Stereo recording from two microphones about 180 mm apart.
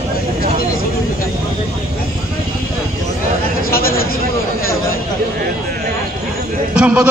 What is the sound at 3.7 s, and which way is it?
Speech, 55° left (ahead or behind).